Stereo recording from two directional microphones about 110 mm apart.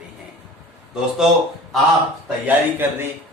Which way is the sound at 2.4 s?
20° right (ahead or behind).